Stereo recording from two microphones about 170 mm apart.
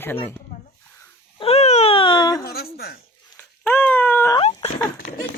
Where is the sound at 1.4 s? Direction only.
40° left (ahead or behind).